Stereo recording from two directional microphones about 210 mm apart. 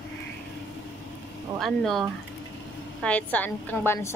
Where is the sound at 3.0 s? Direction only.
5° left (ahead or behind).